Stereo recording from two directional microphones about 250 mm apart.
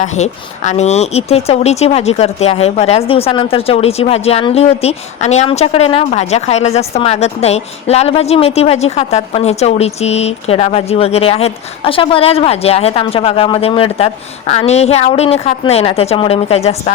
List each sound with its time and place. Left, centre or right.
0.0 s a woman's voice: left